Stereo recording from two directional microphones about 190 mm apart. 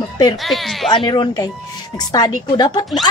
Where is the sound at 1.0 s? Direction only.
25° left (ahead or behind).